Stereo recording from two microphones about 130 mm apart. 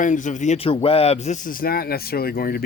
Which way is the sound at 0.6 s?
45° left (ahead or behind).